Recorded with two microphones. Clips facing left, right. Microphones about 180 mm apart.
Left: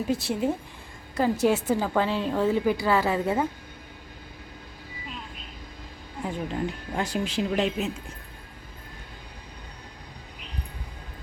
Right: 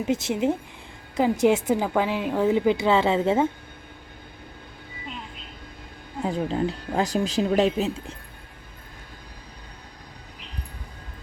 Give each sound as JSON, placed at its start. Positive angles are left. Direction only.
{"t": 0.0, "sound": "a woman's voice", "side_deg": -20}
{"t": 6.2, "sound": "speech", "side_deg": -35}